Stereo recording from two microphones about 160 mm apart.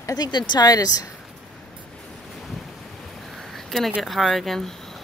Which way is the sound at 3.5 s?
Centre (ahead or behind).